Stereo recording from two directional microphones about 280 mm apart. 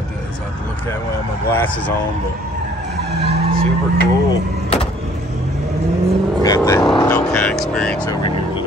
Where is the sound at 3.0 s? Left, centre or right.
Right.